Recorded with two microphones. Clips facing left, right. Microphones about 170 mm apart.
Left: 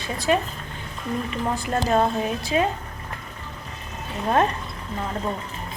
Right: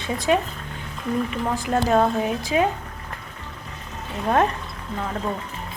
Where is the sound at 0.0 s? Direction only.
20° right (ahead or behind).